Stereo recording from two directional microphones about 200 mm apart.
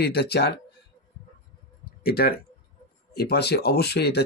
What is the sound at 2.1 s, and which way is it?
Speech, 50° left (ahead or behind).